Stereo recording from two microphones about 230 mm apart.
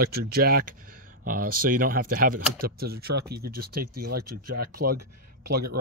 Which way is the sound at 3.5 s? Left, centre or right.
Right.